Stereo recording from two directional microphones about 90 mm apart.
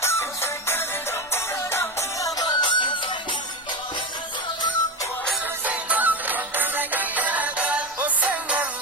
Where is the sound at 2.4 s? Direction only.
60° left (ahead or behind).